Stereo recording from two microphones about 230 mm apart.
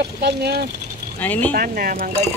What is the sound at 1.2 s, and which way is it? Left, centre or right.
Speech, centre.